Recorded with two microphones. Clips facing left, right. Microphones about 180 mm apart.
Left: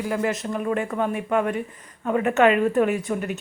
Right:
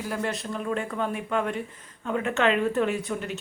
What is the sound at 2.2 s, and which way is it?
A woman's voice, 60° left (ahead or behind).